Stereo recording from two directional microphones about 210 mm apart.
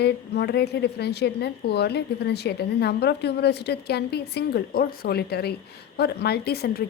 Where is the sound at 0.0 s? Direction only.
50° left (ahead or behind).